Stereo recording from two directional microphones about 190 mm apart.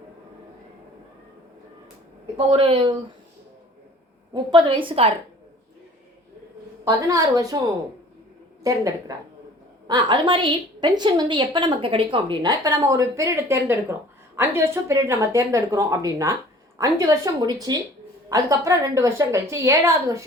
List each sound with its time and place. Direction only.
2.5 s a woman's voice: 30° right (ahead or behind)
4.5 s a woman's voice: 25° right (ahead or behind)
6.8 s a woman's voice: 15° right (ahead or behind)
8.6 s a woman's voice: 15° right (ahead or behind)